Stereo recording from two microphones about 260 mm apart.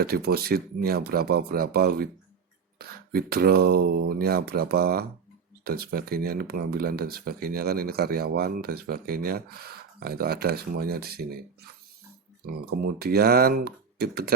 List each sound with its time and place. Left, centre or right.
0.0 s speech: right
12.6 s speech: right